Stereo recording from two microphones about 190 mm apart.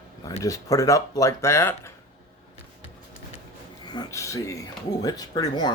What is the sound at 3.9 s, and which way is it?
Speech, 20° left (ahead or behind).